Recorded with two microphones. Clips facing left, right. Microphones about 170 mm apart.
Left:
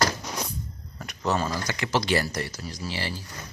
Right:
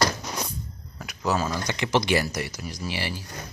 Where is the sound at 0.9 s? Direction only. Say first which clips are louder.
Right 1 dB; 5° right (ahead or behind).